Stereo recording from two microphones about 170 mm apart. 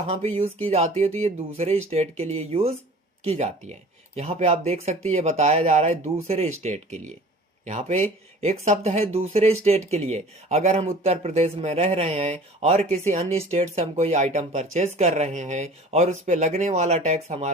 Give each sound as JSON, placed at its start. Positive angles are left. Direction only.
{"t": 0.1, "sound": "speech", "side_deg": -40}